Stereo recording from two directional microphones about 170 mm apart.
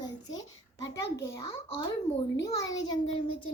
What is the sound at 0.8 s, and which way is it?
Speech, 90° left.